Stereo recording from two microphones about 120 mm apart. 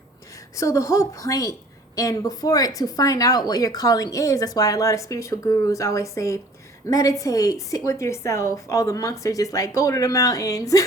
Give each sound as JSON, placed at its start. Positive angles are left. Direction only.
{"t": 0.5, "sound": "speech", "side_deg": 25}